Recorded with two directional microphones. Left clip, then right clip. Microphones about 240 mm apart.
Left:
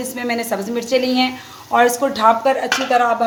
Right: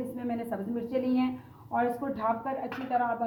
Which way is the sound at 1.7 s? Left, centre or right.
Left.